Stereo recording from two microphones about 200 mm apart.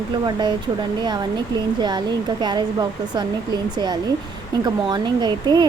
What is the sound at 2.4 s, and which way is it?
Speech, 20° right (ahead or behind).